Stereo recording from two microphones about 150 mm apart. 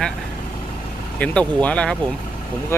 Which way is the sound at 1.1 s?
10° left (ahead or behind).